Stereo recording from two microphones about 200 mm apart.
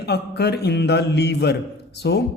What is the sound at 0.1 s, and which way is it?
Speech, 55° left (ahead or behind).